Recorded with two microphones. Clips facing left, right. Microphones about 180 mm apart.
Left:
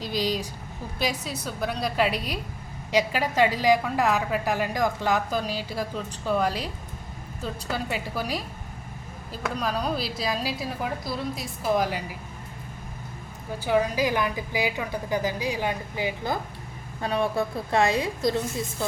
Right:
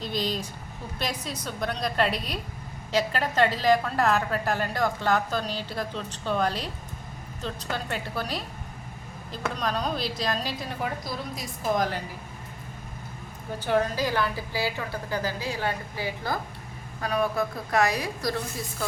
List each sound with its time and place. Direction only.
0.0 s a woman's voice: 10° left (ahead or behind)
13.7 s a woman's voice: 10° left (ahead or behind)